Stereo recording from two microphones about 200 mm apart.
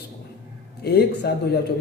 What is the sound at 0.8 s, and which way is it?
Speech, 55° left (ahead or behind).